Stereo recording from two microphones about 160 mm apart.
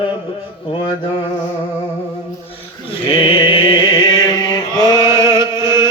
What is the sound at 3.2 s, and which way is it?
Chant, 30° left (ahead or behind).